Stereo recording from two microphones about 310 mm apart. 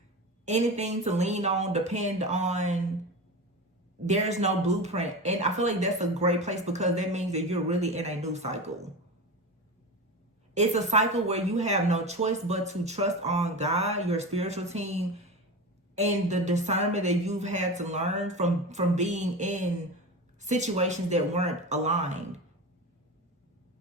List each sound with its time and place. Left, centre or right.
0.4 s speech: right
4.0 s speech: right
10.5 s speech: right